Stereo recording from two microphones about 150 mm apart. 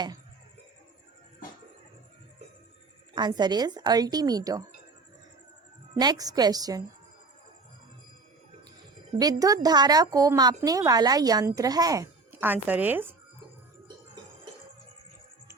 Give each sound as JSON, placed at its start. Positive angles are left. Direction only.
{"t": 3.2, "sound": "a woman's voice", "side_deg": -30}
{"t": 5.9, "sound": "a woman's voice", "side_deg": -25}
{"t": 9.1, "sound": "a woman's voice", "side_deg": -25}
{"t": 12.3, "sound": "speech", "side_deg": -10}